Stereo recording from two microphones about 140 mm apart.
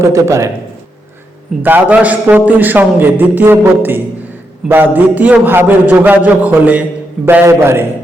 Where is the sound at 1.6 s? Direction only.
15° right (ahead or behind).